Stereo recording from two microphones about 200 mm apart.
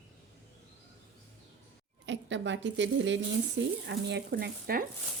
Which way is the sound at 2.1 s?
65° right (ahead or behind).